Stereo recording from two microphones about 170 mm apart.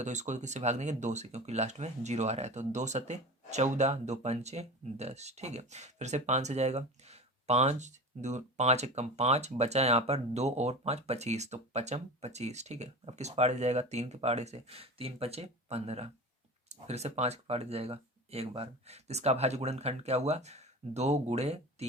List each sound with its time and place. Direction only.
0.0 s speech: 45° right (ahead or behind)